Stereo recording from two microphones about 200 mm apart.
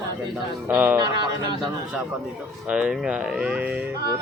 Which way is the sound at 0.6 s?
10° right (ahead or behind).